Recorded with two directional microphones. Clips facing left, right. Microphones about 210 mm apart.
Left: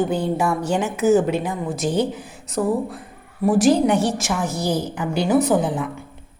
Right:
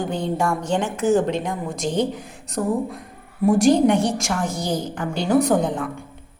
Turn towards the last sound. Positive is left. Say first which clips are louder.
# left 1 dB
turn(degrees=5)  # may be behind; listen again after turning